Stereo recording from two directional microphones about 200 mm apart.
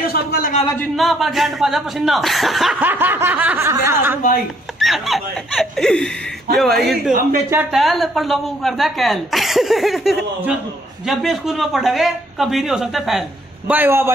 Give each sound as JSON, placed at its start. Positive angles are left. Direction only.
{"t": 0.0, "sound": "a man's voice", "side_deg": 50}
{"t": 0.7, "sound": "speech", "side_deg": 0}
{"t": 4.7, "sound": "a man's voice", "side_deg": 0}